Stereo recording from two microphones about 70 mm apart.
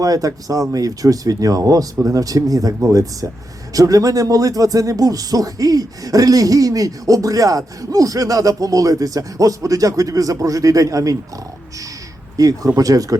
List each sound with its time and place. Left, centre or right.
0.0 s speech: right
12.4 s speech: right